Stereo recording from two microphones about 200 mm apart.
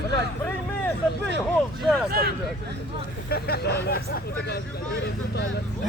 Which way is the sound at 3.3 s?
50° left (ahead or behind).